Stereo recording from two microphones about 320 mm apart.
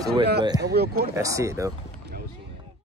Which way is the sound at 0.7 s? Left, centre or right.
Right.